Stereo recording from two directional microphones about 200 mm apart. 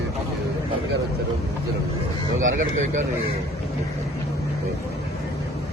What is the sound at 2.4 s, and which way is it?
Speech, 40° right (ahead or behind).